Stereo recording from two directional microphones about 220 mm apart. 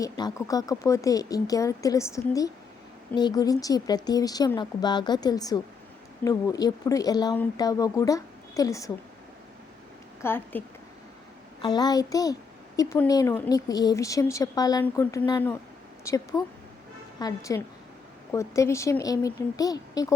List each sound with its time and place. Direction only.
0.0 s a woman's voice: 15° left (ahead or behind)
10.2 s speech: 10° left (ahead or behind)
11.6 s a woman's voice: 20° left (ahead or behind)